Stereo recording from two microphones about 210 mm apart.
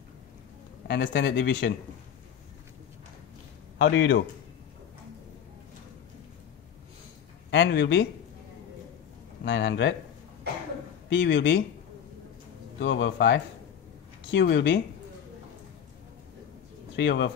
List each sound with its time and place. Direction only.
0.8 s speech: 55° left (ahead or behind)
3.7 s speech: 60° left (ahead or behind)
7.5 s speech: 55° left (ahead or behind)
9.4 s speech: 55° left (ahead or behind)
11.1 s speech: 60° left (ahead or behind)
12.7 s speech: 60° left (ahead or behind)
16.9 s speech: 55° left (ahead or behind)